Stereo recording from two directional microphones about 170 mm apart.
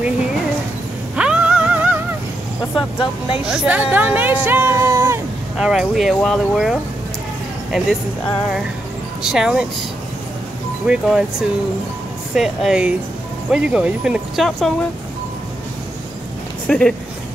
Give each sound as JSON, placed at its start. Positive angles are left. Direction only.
{"t": 1.1, "sound": "music", "side_deg": -5}
{"t": 2.7, "sound": "speech", "side_deg": 30}
{"t": 3.4, "sound": "speech", "side_deg": -5}
{"t": 5.6, "sound": "speech", "side_deg": 0}
{"t": 9.2, "sound": "speech", "side_deg": -5}
{"t": 10.9, "sound": "speech", "side_deg": -5}
{"t": 12.4, "sound": "speech", "side_deg": -5}
{"t": 16.6, "sound": "speech", "side_deg": 5}